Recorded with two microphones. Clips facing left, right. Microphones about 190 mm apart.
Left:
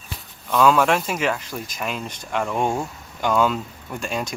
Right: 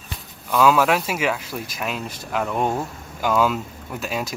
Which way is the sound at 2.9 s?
50° right (ahead or behind).